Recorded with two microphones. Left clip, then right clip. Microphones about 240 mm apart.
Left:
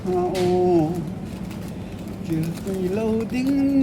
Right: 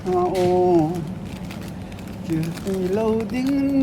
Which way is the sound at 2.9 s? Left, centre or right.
Right.